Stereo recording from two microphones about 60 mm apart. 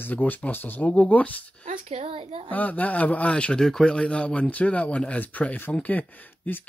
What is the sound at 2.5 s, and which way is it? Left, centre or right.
Speech, left.